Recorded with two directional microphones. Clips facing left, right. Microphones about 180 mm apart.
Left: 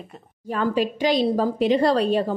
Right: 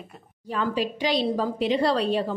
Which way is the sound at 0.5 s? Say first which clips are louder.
Left 4 dB; 50° left (ahead or behind).